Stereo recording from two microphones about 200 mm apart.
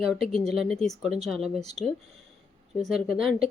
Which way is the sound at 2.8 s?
Centre (ahead or behind).